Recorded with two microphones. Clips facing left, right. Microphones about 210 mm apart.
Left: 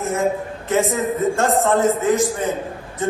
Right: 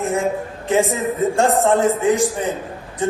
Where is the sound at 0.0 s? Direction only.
15° right (ahead or behind).